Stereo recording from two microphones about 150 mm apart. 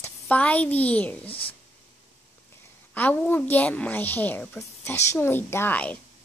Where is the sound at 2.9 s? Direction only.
10° left (ahead or behind).